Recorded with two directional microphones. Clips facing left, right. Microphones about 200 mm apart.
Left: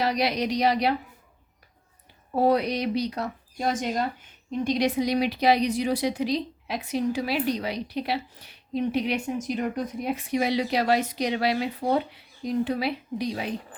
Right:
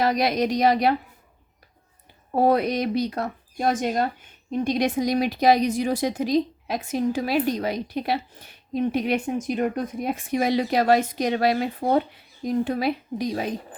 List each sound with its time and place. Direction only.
0.0 s speech: 50° right (ahead or behind)
2.3 s speech: 50° right (ahead or behind)